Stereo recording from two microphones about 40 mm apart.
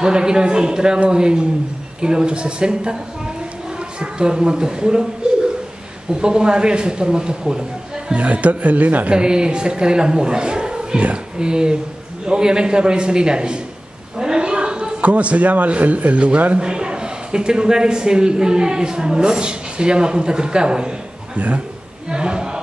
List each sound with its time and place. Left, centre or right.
0.0 s a man's voice: centre
4.0 s a man's voice: right
6.2 s a man's voice: right
8.1 s a man's voice: right
9.1 s a man's voice: right
14.1 s a sound: centre
15.0 s a man's voice: right
16.5 s a man's voice: right
22.1 s a sound: right